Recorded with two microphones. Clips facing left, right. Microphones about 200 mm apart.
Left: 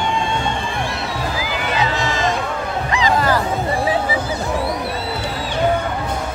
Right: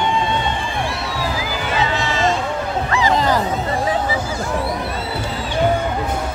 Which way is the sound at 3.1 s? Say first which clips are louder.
Even; 20° right (ahead or behind).